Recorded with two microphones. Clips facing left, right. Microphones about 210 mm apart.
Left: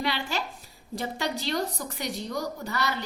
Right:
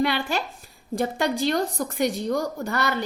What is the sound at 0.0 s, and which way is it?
A woman's voice, 55° right (ahead or behind).